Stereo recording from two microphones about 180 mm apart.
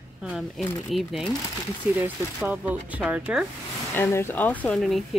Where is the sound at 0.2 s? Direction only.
Centre (ahead or behind).